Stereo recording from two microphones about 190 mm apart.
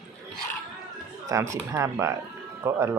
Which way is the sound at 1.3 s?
15° right (ahead or behind).